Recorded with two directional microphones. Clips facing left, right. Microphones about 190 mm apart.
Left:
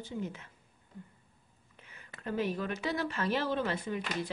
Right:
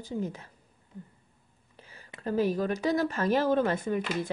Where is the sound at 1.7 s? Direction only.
35° right (ahead or behind).